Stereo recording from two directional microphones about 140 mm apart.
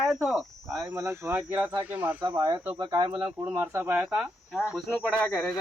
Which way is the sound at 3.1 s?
15° right (ahead or behind).